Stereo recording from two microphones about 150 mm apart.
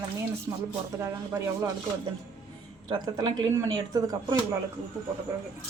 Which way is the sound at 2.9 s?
30° right (ahead or behind).